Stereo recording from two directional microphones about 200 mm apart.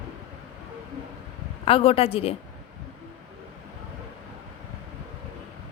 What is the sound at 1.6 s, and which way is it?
Speech, 30° left (ahead or behind).